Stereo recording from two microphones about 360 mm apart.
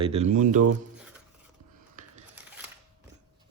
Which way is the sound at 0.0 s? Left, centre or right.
Centre.